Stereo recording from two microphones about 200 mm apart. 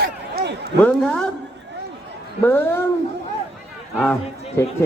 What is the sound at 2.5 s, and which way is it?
Speech, 10° left (ahead or behind).